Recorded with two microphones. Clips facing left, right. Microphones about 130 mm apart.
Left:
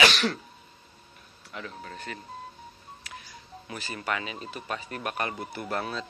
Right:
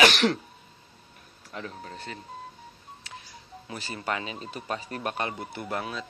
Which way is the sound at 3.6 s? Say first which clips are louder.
Right 1 dB; 30° right (ahead or behind).